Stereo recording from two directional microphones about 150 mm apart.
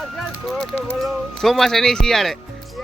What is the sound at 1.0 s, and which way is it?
Speech, centre (ahead or behind).